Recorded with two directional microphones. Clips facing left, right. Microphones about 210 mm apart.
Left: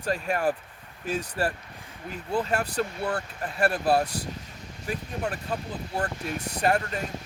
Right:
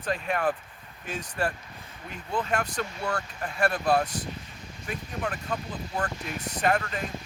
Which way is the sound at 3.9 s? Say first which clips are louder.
Left 1 dB; 10° left (ahead or behind).